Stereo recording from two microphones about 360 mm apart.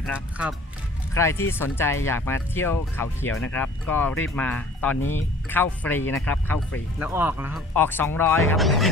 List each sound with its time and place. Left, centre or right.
0.0 s speech: centre
7.0 s speech: centre
7.7 s speech: centre